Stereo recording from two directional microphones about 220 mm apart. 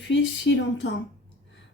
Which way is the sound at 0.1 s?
55° left (ahead or behind).